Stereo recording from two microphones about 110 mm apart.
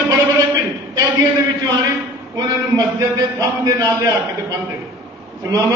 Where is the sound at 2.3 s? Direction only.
35° right (ahead or behind).